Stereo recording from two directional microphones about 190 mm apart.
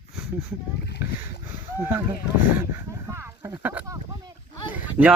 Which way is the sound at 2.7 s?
15° right (ahead or behind).